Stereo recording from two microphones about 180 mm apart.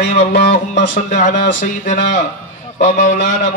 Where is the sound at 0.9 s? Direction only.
45° left (ahead or behind).